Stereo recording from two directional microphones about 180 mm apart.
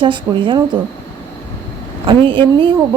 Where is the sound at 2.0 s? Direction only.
30° right (ahead or behind).